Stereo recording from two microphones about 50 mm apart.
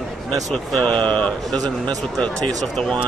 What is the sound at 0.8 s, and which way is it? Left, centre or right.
Speech, left.